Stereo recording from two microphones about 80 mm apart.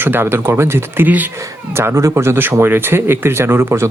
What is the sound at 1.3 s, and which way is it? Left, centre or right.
Speech, right.